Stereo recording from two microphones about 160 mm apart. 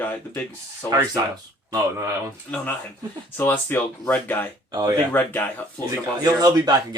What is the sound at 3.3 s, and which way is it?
Speech, 15° left (ahead or behind).